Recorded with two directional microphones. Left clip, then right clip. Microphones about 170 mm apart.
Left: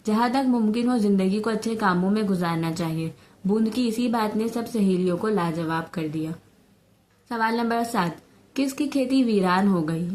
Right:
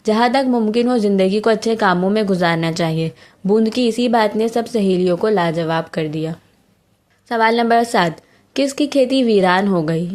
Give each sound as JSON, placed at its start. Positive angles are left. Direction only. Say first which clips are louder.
{"t": 0.0, "sound": "a woman's voice", "louder": "right 8 dB", "side_deg": -30}